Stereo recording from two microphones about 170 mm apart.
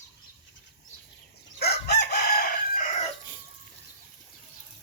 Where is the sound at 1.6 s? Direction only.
75° left (ahead or behind).